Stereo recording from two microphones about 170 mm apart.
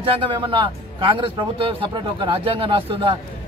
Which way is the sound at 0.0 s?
30° right (ahead or behind).